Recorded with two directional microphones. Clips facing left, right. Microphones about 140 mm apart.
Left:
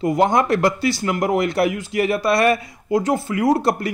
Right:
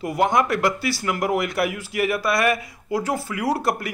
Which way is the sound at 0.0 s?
25° left (ahead or behind).